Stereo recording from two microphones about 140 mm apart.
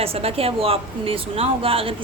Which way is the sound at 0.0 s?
45° right (ahead or behind).